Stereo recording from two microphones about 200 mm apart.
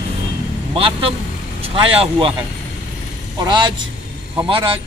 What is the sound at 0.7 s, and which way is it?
Speech, 25° right (ahead or behind).